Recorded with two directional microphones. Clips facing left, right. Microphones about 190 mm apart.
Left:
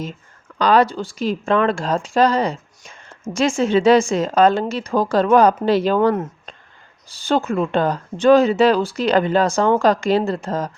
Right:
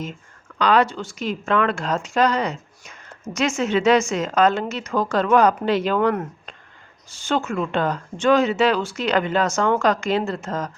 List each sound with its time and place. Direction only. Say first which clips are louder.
0.6 s speech: left 3 dB; 35° left (ahead or behind)